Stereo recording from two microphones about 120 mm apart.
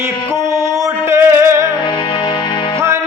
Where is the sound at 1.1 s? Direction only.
20° right (ahead or behind).